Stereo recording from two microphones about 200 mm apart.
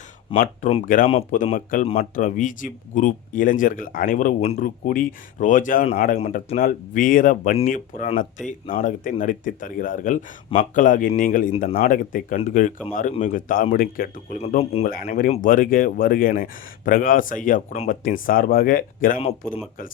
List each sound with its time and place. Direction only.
0.3 s speech: 25° left (ahead or behind)
0.9 s speech: 40° left (ahead or behind)
14.6 s speech: 30° left (ahead or behind)
14.8 s speech: 45° left (ahead or behind)